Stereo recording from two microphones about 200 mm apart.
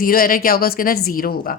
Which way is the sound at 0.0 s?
45° left (ahead or behind).